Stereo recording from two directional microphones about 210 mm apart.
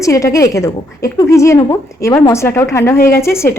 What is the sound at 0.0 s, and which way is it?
A woman's voice, 15° left (ahead or behind).